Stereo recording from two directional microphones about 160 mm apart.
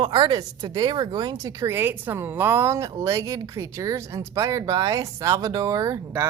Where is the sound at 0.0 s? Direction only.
30° right (ahead or behind).